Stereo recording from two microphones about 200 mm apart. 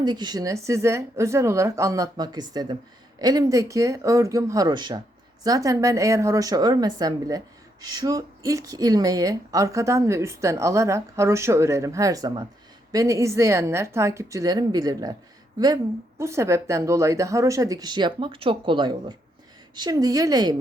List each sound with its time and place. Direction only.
0.0 s a woman's voice: 20° right (ahead or behind)